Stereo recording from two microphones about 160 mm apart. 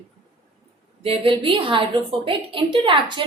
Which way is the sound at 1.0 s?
35° right (ahead or behind).